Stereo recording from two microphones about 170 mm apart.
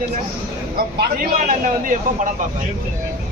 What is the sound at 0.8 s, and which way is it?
Speech, 55° right (ahead or behind).